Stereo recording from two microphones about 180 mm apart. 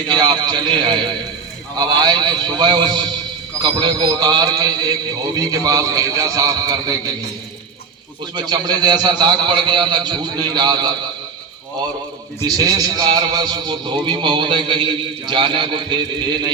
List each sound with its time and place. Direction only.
0.1 s a man's voice: 25° right (ahead or behind)
8.4 s a man's voice: 25° right (ahead or behind)
12.5 s a man's voice: 20° right (ahead or behind)